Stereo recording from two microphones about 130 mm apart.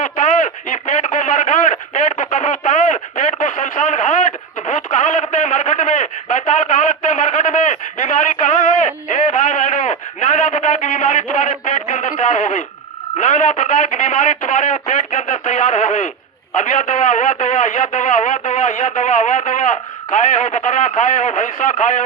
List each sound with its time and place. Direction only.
0.0 s radio: 80° left
9.0 s a sound: 75° left (ahead or behind)
13.1 s radio: 70° left (ahead or behind)